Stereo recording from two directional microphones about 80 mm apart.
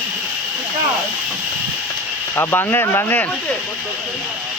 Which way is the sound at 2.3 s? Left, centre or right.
Left.